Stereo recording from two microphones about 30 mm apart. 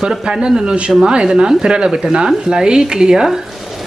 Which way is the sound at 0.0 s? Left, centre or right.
Centre.